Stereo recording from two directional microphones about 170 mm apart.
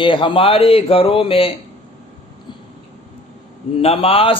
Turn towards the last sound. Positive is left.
turn(degrees=35)  # may be behind; listen again after turning